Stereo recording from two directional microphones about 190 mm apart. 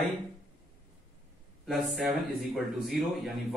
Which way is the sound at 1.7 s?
5° right (ahead or behind).